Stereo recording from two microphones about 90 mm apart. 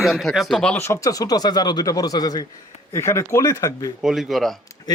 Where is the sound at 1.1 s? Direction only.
45° left (ahead or behind).